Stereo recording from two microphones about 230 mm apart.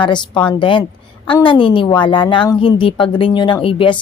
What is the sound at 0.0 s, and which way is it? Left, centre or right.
A woman's voice, centre.